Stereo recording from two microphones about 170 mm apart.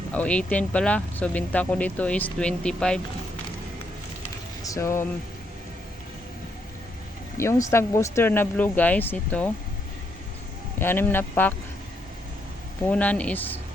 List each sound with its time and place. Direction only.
0.1 s speech: 5° left (ahead or behind)
4.6 s speech: 20° left (ahead or behind)
7.3 s speech: 15° left (ahead or behind)
10.8 s speech: 15° left (ahead or behind)
12.9 s speech: 10° left (ahead or behind)